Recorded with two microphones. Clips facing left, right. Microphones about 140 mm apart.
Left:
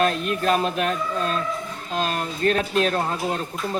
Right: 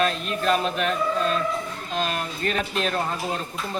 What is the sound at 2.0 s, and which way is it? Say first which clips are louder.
Speech: left 4 dB; 40° left (ahead or behind).